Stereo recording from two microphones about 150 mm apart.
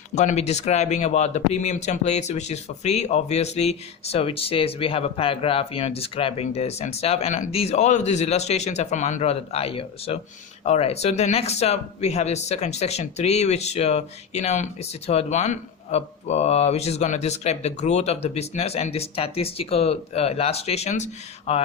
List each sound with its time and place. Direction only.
0.1 s speech: 50° left (ahead or behind)